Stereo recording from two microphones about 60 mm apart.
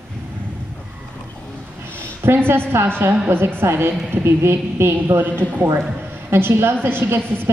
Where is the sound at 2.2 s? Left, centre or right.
Right.